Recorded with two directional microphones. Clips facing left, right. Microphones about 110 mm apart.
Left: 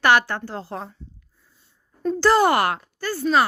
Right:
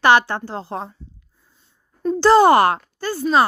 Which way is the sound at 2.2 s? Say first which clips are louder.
Right 5 dB; 25° right (ahead or behind).